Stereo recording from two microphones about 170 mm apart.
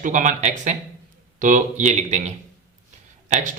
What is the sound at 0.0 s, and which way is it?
A man's voice, 50° right (ahead or behind).